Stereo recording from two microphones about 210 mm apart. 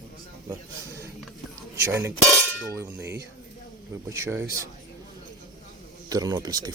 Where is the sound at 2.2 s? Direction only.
Centre (ahead or behind).